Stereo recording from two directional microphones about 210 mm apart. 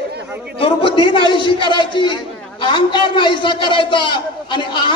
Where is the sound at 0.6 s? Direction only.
25° left (ahead or behind).